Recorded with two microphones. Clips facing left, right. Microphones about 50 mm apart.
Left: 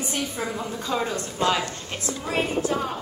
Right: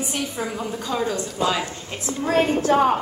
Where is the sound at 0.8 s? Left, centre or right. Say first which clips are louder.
Right 2 dB; centre.